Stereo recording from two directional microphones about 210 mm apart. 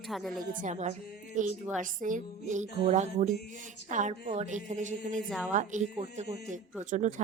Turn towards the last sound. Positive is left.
turn(degrees=-35)  # may be behind; listen again after turning